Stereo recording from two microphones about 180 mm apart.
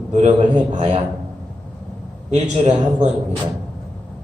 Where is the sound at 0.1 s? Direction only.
40° right (ahead or behind).